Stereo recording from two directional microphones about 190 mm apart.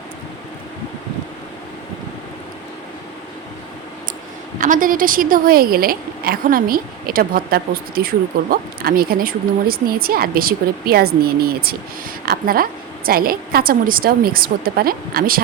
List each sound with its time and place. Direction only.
4.5 s a woman's voice: 45° right (ahead or behind)